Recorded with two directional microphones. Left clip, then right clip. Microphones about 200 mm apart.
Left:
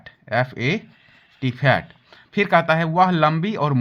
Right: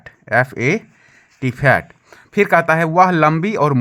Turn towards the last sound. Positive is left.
turn(degrees=-45)  # may be behind; listen again after turning